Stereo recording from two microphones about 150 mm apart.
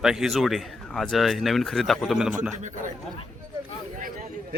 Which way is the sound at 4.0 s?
65° right (ahead or behind).